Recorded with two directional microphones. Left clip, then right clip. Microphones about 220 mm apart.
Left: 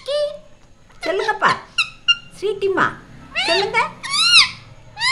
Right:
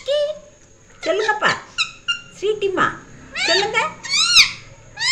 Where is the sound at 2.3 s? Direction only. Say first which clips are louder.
Even; 20° left (ahead or behind).